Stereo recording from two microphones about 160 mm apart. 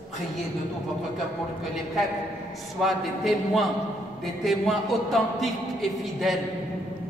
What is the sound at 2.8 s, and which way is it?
A man's voice, centre (ahead or behind).